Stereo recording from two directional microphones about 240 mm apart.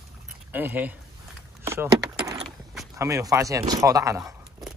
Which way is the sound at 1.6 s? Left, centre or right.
Centre.